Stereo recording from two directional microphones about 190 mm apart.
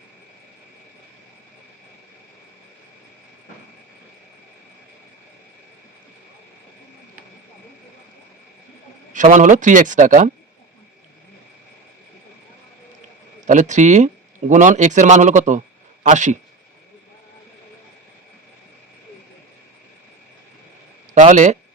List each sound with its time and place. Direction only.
9.1 s a man's voice: 45° right (ahead or behind)
13.4 s a man's voice: 40° right (ahead or behind)
21.2 s a man's voice: 40° right (ahead or behind)